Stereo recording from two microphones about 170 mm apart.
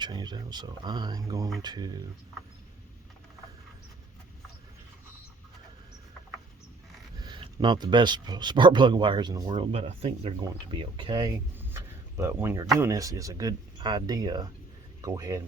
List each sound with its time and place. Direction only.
0.0 s speech: 25° right (ahead or behind)
7.2 s speech: 25° right (ahead or behind)
9.6 s speech: 35° right (ahead or behind)
11.5 s speech: 15° right (ahead or behind)